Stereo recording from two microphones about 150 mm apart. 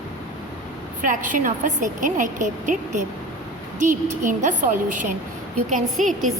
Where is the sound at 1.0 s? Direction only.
60° right (ahead or behind).